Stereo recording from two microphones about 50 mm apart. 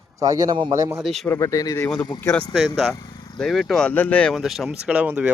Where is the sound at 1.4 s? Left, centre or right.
Left.